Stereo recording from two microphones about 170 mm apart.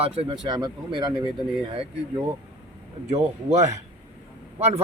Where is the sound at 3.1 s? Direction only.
40° right (ahead or behind).